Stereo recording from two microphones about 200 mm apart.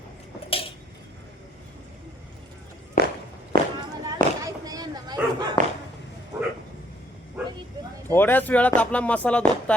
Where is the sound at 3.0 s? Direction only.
60° right (ahead or behind).